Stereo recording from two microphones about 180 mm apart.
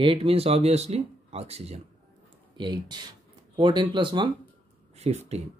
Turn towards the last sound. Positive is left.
turn(degrees=-35)  # may be behind; listen again after turning